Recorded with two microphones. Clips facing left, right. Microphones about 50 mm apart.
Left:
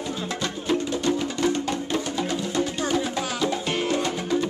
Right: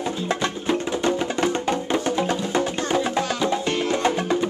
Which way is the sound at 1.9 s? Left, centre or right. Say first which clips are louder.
Right 4 dB; right.